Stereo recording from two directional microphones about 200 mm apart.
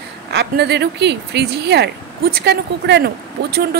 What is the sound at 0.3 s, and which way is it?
A woman's voice, 55° right (ahead or behind).